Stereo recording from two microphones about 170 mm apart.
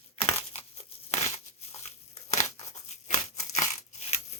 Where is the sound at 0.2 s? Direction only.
40° left (ahead or behind).